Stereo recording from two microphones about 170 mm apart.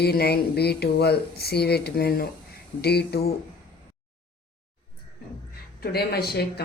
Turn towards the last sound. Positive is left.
turn(degrees=70)  # may be behind; listen again after turning